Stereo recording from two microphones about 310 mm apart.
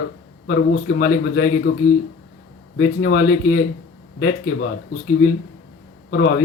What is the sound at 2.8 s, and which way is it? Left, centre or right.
Speech, left.